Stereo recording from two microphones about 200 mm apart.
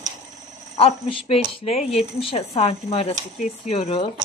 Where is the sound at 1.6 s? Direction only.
30° left (ahead or behind).